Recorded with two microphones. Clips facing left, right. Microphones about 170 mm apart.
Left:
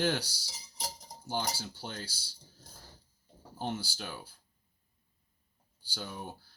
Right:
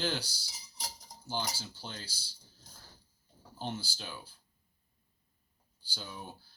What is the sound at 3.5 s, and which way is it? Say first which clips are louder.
Speech: left 3 dB; 55° left (ahead or behind).